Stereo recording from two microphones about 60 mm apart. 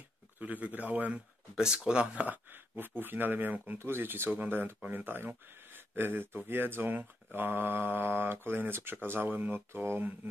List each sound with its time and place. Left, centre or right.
0.4 s speech: right
1.5 s speech: centre; by 10.1 s right